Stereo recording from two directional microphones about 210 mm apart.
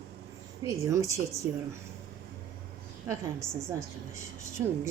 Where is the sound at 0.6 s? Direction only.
15° right (ahead or behind).